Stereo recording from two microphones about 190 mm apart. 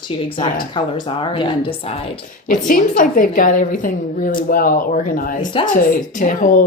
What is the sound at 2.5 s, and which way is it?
Speech, 45° left (ahead or behind).